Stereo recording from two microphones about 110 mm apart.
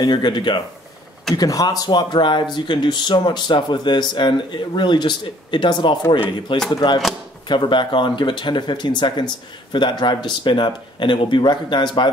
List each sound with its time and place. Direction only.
0.0 s speech: 45° left (ahead or behind)